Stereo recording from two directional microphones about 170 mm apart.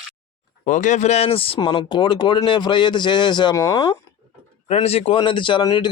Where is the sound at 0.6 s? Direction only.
45° left (ahead or behind); by 3.9 s 25° left (ahead or behind).